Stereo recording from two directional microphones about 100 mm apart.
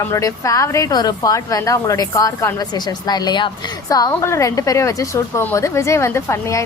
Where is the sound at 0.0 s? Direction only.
35° left (ahead or behind).